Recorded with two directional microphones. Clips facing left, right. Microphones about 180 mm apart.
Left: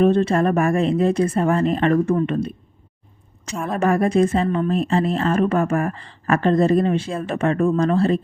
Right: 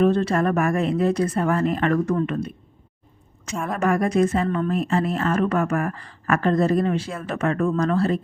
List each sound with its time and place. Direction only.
0.0 s speech: 25° left (ahead or behind)
3.7 s speech: 30° left (ahead or behind)